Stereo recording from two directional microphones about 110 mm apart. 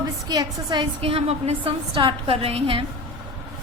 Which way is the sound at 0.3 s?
40° right (ahead or behind).